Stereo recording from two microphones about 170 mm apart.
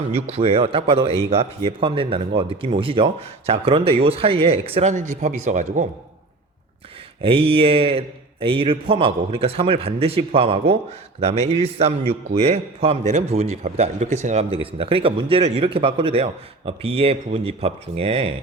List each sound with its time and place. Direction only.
0.1 s a man's voice: 35° right (ahead or behind)
7.2 s a man's voice: 30° right (ahead or behind)